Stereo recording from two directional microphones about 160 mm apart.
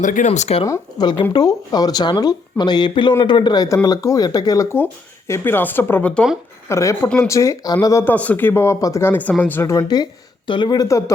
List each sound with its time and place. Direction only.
0.0 s speech: 50° left (ahead or behind)
0.6 s speech: 25° left (ahead or behind)